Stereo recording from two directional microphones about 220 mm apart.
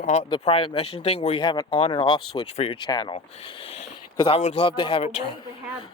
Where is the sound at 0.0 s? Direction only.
30° left (ahead or behind).